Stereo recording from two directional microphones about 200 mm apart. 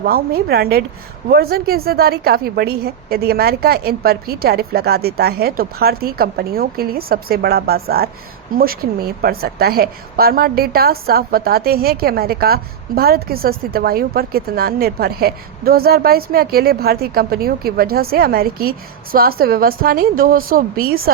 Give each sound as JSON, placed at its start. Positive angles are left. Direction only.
{"t": 0.0, "sound": "a woman's voice", "side_deg": -50}